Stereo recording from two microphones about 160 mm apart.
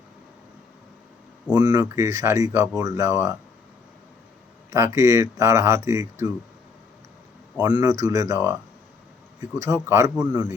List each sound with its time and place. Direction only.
1.5 s speech: 25° right (ahead or behind)
4.7 s speech: 20° right (ahead or behind)
7.6 s speech: 20° right (ahead or behind)
9.6 s speech: 15° right (ahead or behind)